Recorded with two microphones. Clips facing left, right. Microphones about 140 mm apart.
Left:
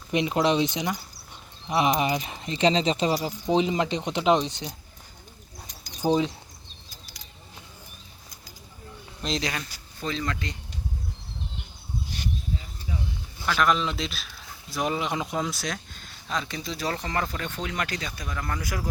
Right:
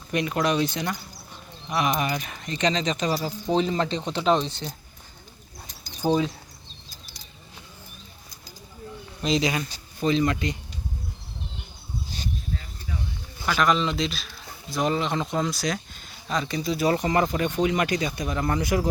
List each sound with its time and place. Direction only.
0.1 s speech: 20° left (ahead or behind)
3.5 s speech: 15° left (ahead or behind)
6.1 s speech: 20° left (ahead or behind)
9.2 s speech: 5° right (ahead or behind)
9.6 s speech: 20° right (ahead or behind)
13.4 s speech: centre (ahead or behind); by 18.9 s 25° right (ahead or behind)